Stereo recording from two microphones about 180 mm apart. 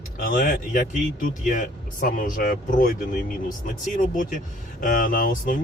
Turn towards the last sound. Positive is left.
turn(degrees=50)  # may be behind; listen again after turning